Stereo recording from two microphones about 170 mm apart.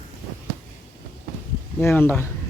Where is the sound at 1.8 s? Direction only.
10° left (ahead or behind).